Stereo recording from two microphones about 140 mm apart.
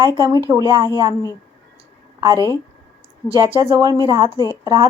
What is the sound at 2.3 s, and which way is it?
Speech, 25° left (ahead or behind).